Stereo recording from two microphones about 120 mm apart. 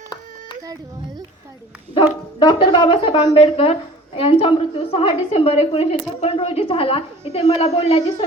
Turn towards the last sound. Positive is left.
turn(degrees=55)  # may be behind; listen again after turning